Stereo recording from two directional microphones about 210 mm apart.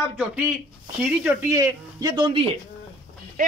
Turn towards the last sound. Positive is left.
turn(degrees=-40)  # may be behind; listen again after turning